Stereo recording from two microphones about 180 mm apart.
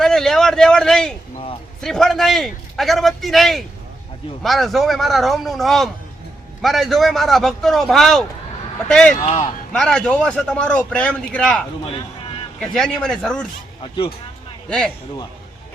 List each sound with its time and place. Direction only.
0.0 s a man's voice: 5° left (ahead or behind)
9.2 s a man's voice: 30° left (ahead or behind)
9.7 s a man's voice: 5° left (ahead or behind)
11.9 s a sound: 30° left (ahead or behind)
12.5 s a man's voice: 5° left (ahead or behind)
13.8 s speech: 30° left (ahead or behind)
14.7 s a man's voice: 5° left (ahead or behind)